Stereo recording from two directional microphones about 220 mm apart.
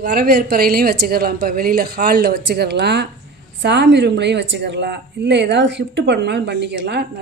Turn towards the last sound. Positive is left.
turn(degrees=-50)  # may be behind; listen again after turning